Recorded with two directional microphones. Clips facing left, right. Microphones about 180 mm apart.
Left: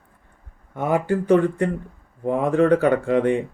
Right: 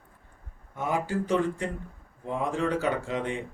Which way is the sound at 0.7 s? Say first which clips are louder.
Left 8 dB; 55° left (ahead or behind).